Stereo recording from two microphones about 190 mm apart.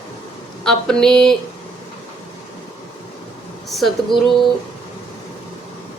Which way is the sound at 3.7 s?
Centre (ahead or behind).